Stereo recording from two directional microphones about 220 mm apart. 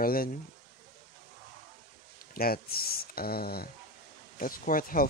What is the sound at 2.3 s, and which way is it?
Speech, 45° left (ahead or behind).